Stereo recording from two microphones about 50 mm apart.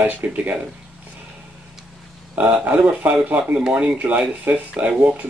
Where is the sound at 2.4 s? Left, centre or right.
Right.